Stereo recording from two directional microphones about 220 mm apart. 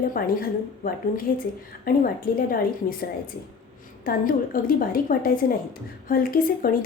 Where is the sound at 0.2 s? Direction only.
40° left (ahead or behind).